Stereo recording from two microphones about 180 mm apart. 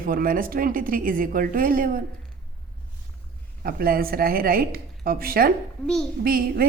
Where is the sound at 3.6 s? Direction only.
55° right (ahead or behind).